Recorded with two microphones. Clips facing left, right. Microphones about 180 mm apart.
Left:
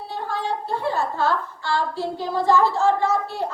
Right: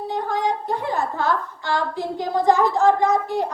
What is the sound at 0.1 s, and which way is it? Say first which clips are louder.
A woman's voice: right 3 dB; 15° right (ahead or behind).